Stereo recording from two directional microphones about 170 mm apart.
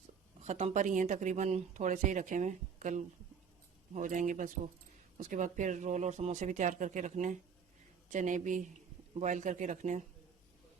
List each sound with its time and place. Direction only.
0.4 s speech: 45° right (ahead or behind)